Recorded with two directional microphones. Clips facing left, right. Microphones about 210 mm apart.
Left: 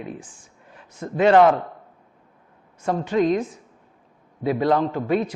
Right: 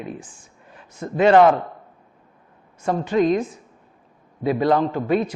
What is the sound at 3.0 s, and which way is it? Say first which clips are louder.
Speech: right 1 dB; 10° right (ahead or behind).